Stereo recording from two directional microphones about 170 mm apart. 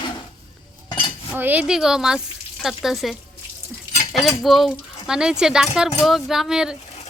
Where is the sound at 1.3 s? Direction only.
10° right (ahead or behind).